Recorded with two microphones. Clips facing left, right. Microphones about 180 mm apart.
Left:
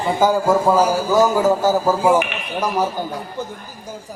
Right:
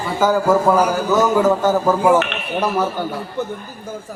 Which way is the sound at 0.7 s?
25° left (ahead or behind).